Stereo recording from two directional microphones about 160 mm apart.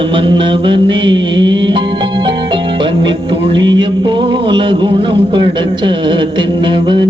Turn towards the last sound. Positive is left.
turn(degrees=-30)  # may be behind; listen again after turning